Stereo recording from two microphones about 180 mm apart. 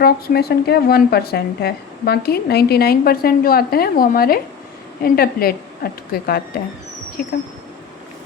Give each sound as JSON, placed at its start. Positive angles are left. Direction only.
{"t": 0.0, "sound": "a woman's voice", "side_deg": 60}